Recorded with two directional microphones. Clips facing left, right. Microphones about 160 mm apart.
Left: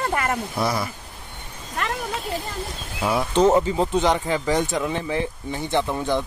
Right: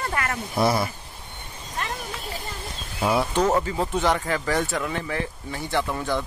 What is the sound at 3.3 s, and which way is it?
Speech, 20° left (ahead or behind).